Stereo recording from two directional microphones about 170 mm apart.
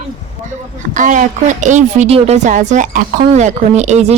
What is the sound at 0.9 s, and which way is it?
A woman's voice, 50° right (ahead or behind).